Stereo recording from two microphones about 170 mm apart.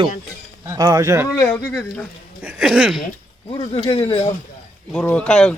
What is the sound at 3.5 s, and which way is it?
Speech, 30° left (ahead or behind).